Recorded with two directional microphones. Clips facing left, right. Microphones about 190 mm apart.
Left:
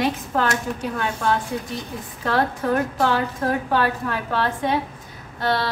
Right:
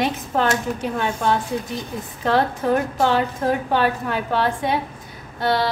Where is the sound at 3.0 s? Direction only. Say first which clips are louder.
Right 2 dB; 20° right (ahead or behind).